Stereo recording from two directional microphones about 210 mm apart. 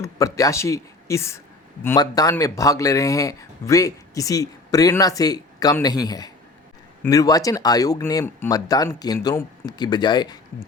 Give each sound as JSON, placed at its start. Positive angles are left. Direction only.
{"t": 0.0, "sound": "speech", "side_deg": 15}